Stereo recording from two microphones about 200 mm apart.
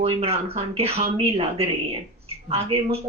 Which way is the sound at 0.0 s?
30° right (ahead or behind).